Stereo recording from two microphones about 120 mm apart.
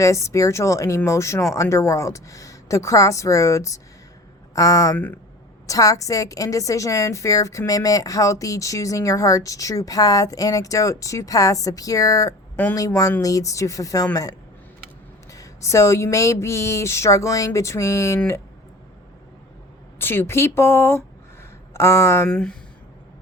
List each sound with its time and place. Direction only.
0.0 s a woman's voice: 25° left (ahead or behind)
4.9 s speech: 15° left (ahead or behind)
5.6 s a woman's voice: 30° left (ahead or behind)
20.0 s a woman's voice: 20° left (ahead or behind)
22.3 s speech: 5° left (ahead or behind)